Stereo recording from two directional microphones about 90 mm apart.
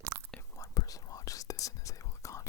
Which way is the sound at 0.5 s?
40° left (ahead or behind).